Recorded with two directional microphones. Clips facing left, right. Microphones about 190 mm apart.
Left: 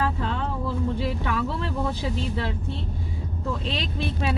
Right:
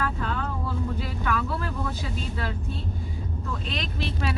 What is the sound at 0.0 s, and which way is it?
Vehicle, 25° left (ahead or behind).